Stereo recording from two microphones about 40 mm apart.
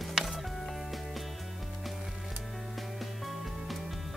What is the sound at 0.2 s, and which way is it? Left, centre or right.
Music, centre.